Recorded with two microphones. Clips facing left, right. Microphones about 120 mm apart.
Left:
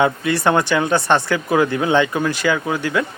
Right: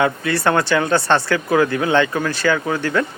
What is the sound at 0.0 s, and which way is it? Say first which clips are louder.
Speech: left 1 dB; 20° left (ahead or behind).